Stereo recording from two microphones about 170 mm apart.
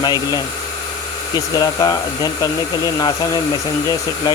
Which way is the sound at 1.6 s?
20° left (ahead or behind).